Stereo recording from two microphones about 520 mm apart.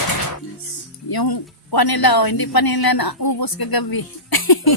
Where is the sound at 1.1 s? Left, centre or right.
Left.